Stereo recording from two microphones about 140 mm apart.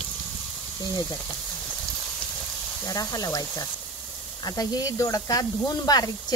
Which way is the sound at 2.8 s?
25° left (ahead or behind).